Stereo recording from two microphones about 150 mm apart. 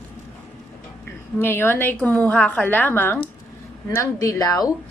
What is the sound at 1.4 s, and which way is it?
A woman's voice, 15° left (ahead or behind).